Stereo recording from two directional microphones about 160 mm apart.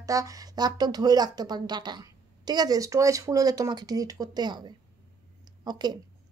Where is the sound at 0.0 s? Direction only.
20° right (ahead or behind).